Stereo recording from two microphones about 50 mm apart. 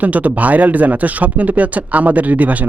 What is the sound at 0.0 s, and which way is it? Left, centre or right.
Speech, right.